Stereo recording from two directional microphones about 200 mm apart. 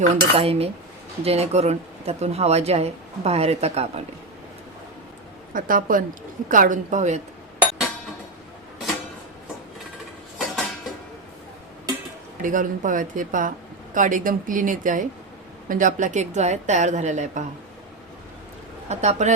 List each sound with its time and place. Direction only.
0.0 s cutlery: 30° right (ahead or behind)
1.2 s speech: 30° right (ahead or behind)
5.5 s a woman's voice: 45° right (ahead or behind)
10.3 s a sound: centre (ahead or behind)
12.4 s speech: 40° right (ahead or behind)
18.9 s speech: 35° right (ahead or behind)